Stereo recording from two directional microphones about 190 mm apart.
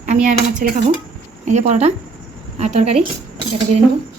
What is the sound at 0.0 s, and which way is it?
Speech, 40° right (ahead or behind).